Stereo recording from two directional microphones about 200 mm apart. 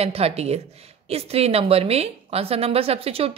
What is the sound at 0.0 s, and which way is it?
Speech, 30° right (ahead or behind).